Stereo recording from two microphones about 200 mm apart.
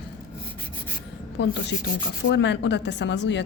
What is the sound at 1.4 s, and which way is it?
A woman's voice, 60° left (ahead or behind).